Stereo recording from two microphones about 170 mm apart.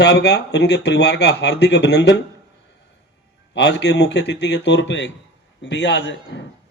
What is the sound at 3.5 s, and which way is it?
A man's voice, 90° left.